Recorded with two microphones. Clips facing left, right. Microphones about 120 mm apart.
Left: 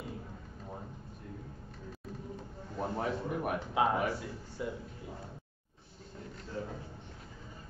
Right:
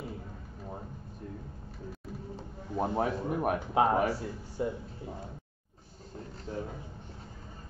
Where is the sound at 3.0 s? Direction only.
40° right (ahead or behind).